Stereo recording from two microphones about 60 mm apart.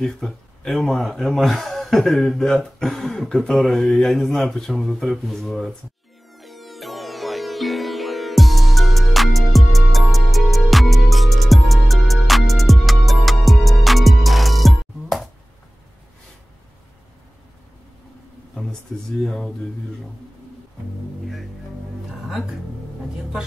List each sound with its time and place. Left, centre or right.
0.0 s speech: centre
3.3 s speech: centre
3.9 s speech: centre
6.3 s music: centre
18.5 s a sound: centre
19.2 s speech: centre